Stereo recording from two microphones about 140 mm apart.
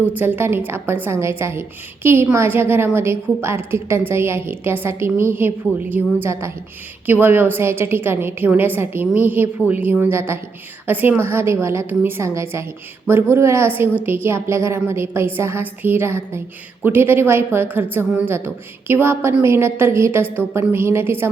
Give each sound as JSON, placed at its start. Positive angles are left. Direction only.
{"t": 0.0, "sound": "a woman's voice", "side_deg": -10}